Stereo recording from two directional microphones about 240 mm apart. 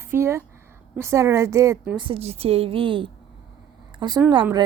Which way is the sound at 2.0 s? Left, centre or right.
Right.